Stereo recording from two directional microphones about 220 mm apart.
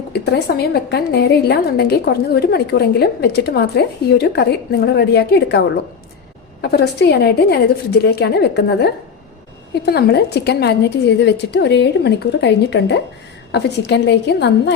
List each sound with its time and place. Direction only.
0.1 s a woman's voice: 45° left (ahead or behind)